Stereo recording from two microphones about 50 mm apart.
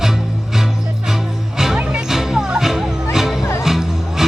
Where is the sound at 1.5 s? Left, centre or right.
Centre.